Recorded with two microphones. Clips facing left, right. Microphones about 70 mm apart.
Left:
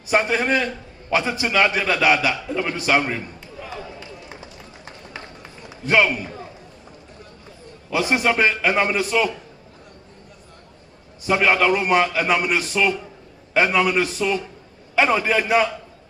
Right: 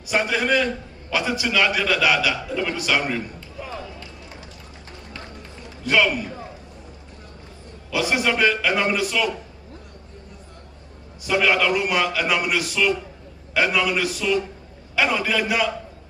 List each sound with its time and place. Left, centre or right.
0.1 s a man's voice: left
5.8 s a man's voice: left
7.9 s a man's voice: left
11.2 s a man's voice: left